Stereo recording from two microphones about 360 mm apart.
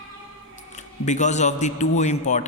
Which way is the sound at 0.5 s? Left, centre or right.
Centre.